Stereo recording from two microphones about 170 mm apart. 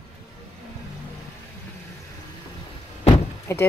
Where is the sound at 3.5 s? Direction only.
15° left (ahead or behind).